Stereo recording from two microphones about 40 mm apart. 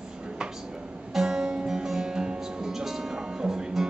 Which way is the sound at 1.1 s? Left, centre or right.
Centre.